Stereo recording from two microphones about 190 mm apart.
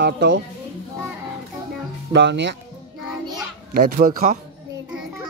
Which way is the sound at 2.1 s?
65° right (ahead or behind).